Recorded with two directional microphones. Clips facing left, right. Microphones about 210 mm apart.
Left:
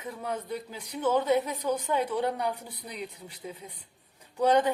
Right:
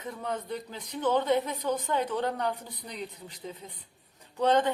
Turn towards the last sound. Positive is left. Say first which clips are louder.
# left 1 dB
turn(degrees=10)  # may be behind; listen again after turning